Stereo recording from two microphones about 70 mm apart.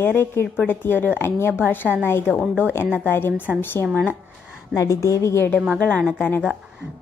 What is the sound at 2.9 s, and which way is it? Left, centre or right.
Speech, left.